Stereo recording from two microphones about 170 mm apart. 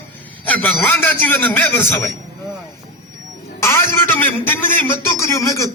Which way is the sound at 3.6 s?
15° left (ahead or behind).